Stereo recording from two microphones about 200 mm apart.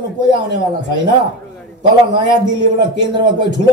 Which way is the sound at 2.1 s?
60° left (ahead or behind).